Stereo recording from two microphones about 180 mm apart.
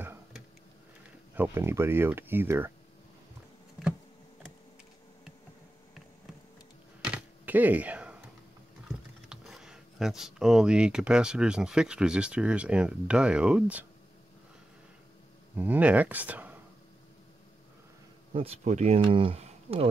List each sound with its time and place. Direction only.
0.0 s a sound: 10° right (ahead or behind)
1.3 s speech: 10° right (ahead or behind)
7.1 s a sound: 10° right (ahead or behind)
8.8 s speech: centre (ahead or behind)
15.5 s speech: 10° right (ahead or behind)
18.3 s speech: 35° right (ahead or behind)